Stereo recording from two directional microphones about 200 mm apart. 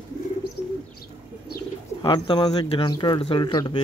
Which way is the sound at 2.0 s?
25° left (ahead or behind).